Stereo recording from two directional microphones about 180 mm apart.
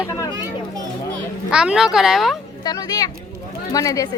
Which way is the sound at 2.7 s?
20° left (ahead or behind).